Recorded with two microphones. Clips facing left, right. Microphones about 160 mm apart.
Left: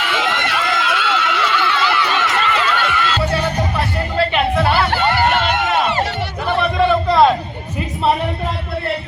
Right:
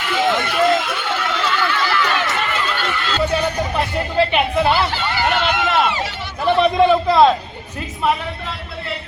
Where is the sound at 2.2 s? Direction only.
90° left.